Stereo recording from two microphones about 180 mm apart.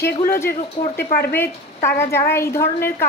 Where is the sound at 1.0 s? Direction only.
60° left (ahead or behind).